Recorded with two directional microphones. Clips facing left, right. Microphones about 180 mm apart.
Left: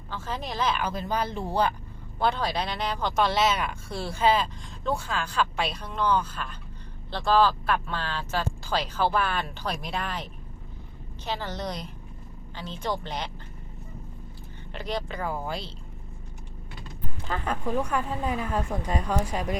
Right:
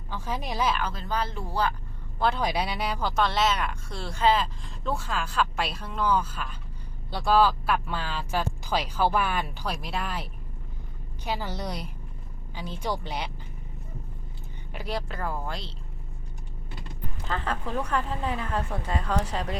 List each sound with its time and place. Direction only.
0.1 s speech: 10° right (ahead or behind)
0.8 s a woman's voice: 15° left (ahead or behind)
2.1 s a woman's voice: centre (ahead or behind)
2.4 s speech: 10° right (ahead or behind)
11.3 s speech: 10° right (ahead or behind)
14.7 s speech: 5° right (ahead or behind)
17.2 s a woman's voice: 10° left (ahead or behind)